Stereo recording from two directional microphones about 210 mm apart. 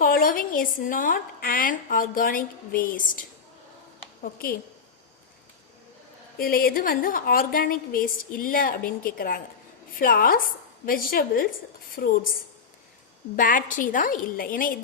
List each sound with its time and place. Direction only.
0.0 s a woman's voice: 45° left (ahead or behind)
6.4 s a woman's voice: 45° left (ahead or behind)
13.3 s a woman's voice: 40° left (ahead or behind)